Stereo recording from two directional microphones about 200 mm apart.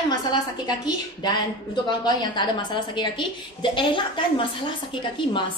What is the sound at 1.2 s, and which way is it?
A woman's voice, 20° left (ahead or behind).